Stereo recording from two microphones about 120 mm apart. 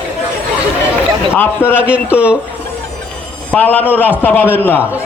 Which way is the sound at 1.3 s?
15° left (ahead or behind).